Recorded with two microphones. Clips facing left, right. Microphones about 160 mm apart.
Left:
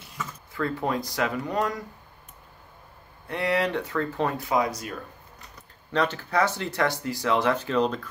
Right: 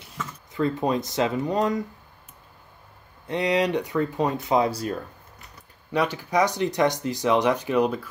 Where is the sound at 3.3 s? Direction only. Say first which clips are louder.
Right 3 dB; 20° right (ahead or behind).